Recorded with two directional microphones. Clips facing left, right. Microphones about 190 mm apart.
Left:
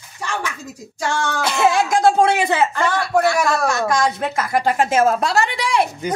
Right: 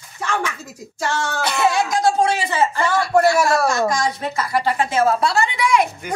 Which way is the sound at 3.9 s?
55° left (ahead or behind).